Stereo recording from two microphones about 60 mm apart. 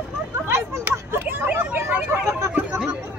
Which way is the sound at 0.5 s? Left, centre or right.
Right.